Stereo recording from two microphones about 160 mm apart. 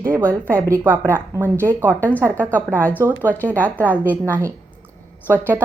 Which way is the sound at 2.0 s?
10° left (ahead or behind).